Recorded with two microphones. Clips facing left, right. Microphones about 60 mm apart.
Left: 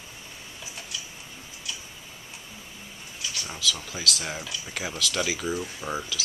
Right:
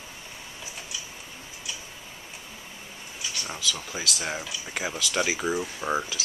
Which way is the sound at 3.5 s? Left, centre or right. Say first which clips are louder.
Left 2 dB; centre.